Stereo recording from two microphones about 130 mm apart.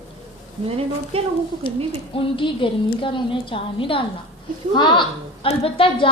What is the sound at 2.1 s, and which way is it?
A woman's voice, 40° left (ahead or behind).